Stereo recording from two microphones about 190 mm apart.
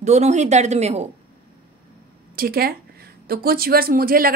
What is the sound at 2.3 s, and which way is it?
A woman's voice, 50° right (ahead or behind).